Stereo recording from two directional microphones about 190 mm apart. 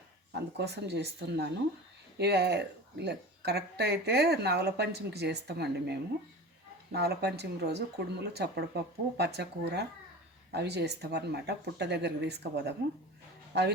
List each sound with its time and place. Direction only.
0.5 s speech: 60° right (ahead or behind)